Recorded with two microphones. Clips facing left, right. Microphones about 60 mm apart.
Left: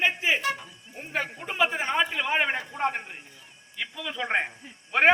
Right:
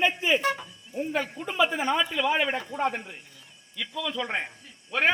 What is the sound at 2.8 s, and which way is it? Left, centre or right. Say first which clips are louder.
A man's voice: left 1 dB; left.